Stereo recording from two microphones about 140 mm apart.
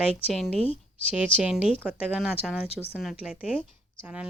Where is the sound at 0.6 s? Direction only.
45° left (ahead or behind).